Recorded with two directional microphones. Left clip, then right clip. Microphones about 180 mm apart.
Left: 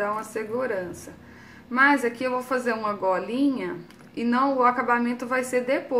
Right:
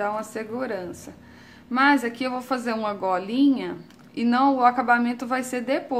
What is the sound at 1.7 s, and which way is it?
A woman's voice, 45° right (ahead or behind).